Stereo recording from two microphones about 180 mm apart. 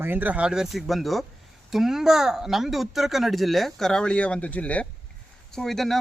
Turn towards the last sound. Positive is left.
turn(degrees=0)  # may be behind; listen again after turning